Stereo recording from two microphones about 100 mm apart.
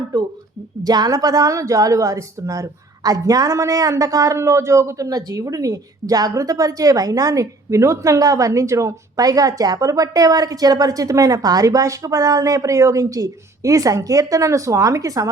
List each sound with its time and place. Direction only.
0.1 s a woman's voice: 40° right (ahead or behind)